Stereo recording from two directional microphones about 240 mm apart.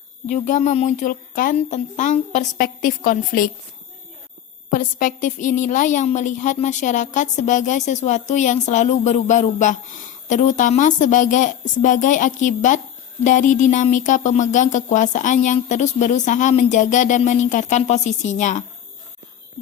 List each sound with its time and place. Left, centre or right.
0.3 s a woman's voice: left
4.7 s a woman's voice: left